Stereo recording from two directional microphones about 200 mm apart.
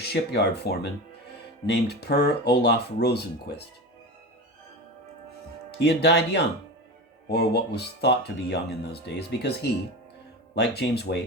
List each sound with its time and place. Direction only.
0.0 s speech: 55° left (ahead or behind)
5.8 s speech: 55° left (ahead or behind)